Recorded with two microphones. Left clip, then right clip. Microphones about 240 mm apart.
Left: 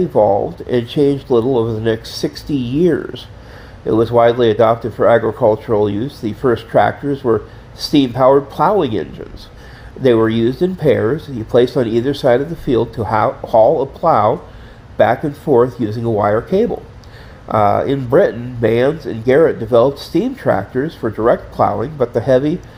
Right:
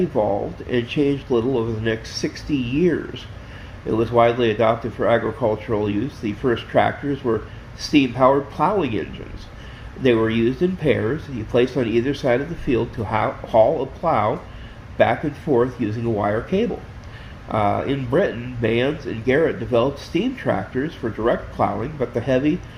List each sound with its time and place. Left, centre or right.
0.1 s speech: left